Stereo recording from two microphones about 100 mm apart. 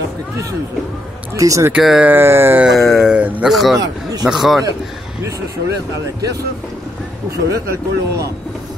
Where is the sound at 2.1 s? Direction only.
20° right (ahead or behind).